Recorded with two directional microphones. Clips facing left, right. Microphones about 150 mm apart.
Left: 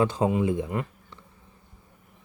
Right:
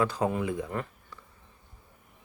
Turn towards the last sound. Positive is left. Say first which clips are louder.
# left 3 dB
turn(degrees=20)  # may be behind; listen again after turning